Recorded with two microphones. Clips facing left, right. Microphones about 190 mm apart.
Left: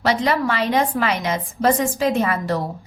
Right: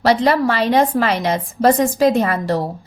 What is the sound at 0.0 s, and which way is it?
A woman's voice, 35° right (ahead or behind).